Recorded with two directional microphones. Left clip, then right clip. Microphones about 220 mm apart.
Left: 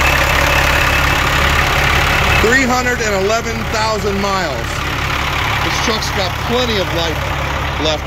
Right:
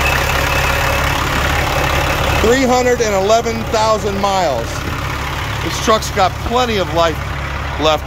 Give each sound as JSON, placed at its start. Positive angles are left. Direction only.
{"t": 2.5, "sound": "speech", "side_deg": 0}
{"t": 6.6, "sound": "speech", "side_deg": -10}